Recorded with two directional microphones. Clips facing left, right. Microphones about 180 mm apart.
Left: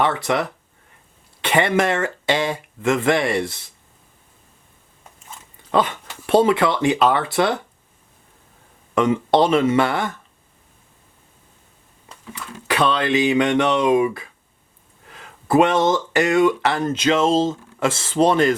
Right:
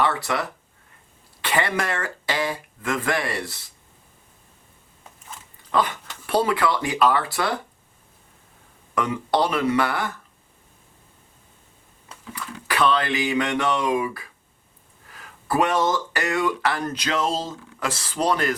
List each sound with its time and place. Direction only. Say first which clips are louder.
0.0 s speech: left 4 dB; 20° left (ahead or behind)
6.2 s speech: left 6 dB; 25° left (ahead or behind)
9.0 s speech: left 6 dB; 25° left (ahead or behind)
12.3 s speech: left 4 dB; 25° left (ahead or behind)